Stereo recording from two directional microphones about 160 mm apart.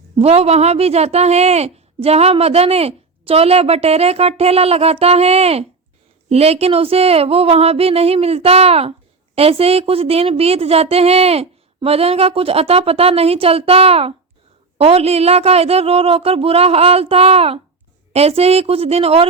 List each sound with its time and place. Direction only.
0.2 s a woman's voice: 40° right (ahead or behind)